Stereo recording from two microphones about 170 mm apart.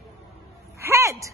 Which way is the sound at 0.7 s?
15° right (ahead or behind).